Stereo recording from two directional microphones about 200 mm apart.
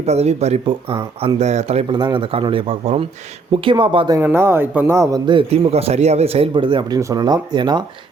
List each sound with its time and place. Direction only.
0.0 s speech: 30° right (ahead or behind)
4.2 s speech: 10° right (ahead or behind)